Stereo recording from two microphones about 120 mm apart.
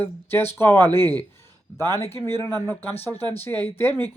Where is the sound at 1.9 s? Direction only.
20° left (ahead or behind).